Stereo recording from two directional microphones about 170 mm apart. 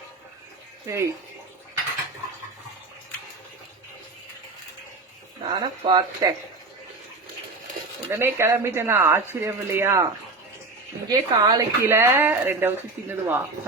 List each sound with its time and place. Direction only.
0.9 s speech: 15° right (ahead or behind)
5.5 s speech: 30° right (ahead or behind)
8.1 s speech: 15° right (ahead or behind)
11.1 s speech: 25° right (ahead or behind)